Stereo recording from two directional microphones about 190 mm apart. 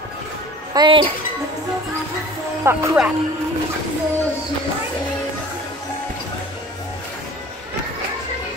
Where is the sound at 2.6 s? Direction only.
15° right (ahead or behind).